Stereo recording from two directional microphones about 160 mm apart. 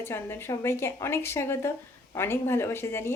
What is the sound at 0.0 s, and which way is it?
Speech, 15° left (ahead or behind).